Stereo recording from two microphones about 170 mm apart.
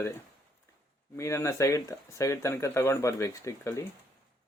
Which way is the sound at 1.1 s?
15° left (ahead or behind).